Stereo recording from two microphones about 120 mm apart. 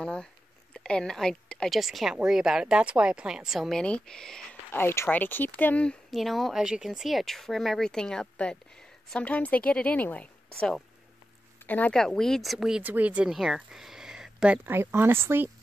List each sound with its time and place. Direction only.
0.0 s a woman's voice: 5° left (ahead or behind)
4.7 s a woman's voice: 20° left (ahead or behind)
6.0 s a woman's voice: centre (ahead or behind); by 15.5 s 20° right (ahead or behind)